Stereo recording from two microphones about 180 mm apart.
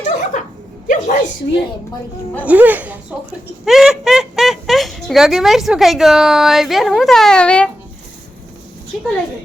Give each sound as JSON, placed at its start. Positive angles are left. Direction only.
{"t": 0.0, "sound": "chuckle", "side_deg": 45}
{"t": 0.9, "sound": "a sound", "side_deg": 45}
{"t": 2.4, "sound": "speech", "side_deg": -10}